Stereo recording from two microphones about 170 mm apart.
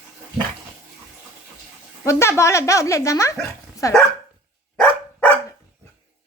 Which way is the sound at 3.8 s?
20° left (ahead or behind).